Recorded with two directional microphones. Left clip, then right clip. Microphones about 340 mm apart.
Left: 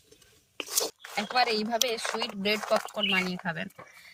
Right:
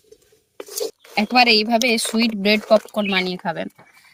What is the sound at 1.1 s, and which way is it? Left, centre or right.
Speech, right.